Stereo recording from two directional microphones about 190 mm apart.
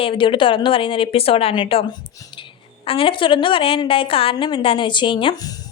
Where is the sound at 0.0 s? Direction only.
25° left (ahead or behind).